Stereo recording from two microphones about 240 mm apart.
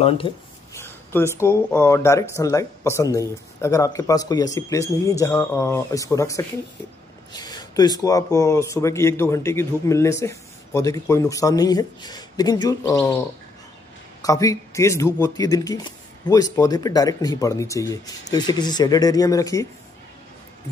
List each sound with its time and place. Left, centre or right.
0.2 s speech: left
1.1 s speech: centre
14.2 s speech: centre